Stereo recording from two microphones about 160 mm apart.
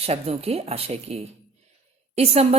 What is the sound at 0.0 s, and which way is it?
A woman's voice, 40° right (ahead or behind).